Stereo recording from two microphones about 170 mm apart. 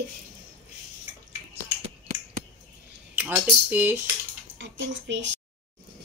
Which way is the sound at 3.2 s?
10° right (ahead or behind).